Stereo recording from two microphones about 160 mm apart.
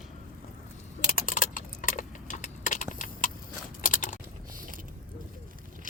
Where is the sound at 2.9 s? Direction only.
55° left (ahead or behind).